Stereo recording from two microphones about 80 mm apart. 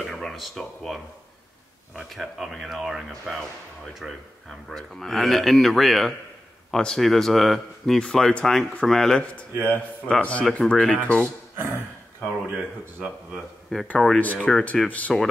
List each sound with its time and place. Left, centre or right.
0.0 s speech: centre
9.5 s a man's voice: right
10.0 s speech: centre
11.5 s a sound: right
13.0 s speech: centre
14.2 s speech: centre